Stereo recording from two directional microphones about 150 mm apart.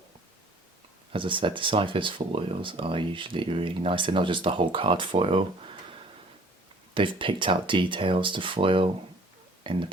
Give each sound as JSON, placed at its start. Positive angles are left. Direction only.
{"t": 1.1, "sound": "speech", "side_deg": -35}
{"t": 6.9, "sound": "speech", "side_deg": -35}